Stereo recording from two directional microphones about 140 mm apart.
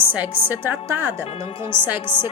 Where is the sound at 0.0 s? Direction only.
15° right (ahead or behind).